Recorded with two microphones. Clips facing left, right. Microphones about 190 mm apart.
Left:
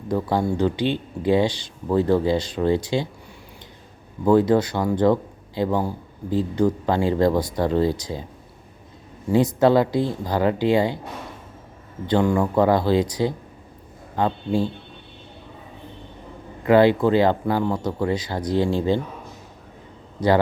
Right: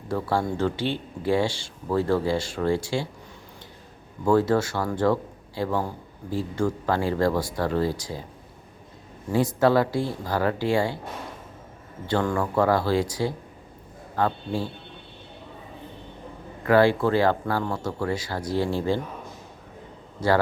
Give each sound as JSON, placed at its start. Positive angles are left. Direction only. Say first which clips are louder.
{"t": 0.1, "sound": "speech", "louder": "left 3 dB", "side_deg": 15}
{"t": 4.3, "sound": "speech", "louder": "left 4 dB", "side_deg": 20}
{"t": 9.3, "sound": "speech", "louder": "left 4 dB", "side_deg": 20}
{"t": 12.0, "sound": "speech", "louder": "left 5 dB", "side_deg": 15}
{"t": 16.6, "sound": "speech", "louder": "left 3 dB", "side_deg": 20}
{"t": 20.2, "sound": "a man's voice", "louder": "left 3 dB", "side_deg": 15}